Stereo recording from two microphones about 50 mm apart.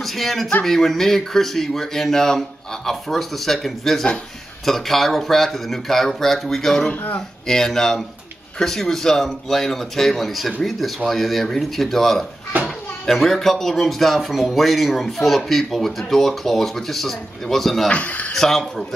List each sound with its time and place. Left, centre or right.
0.0 s speech: centre
17.8 s speech: left
18.3 s speech: centre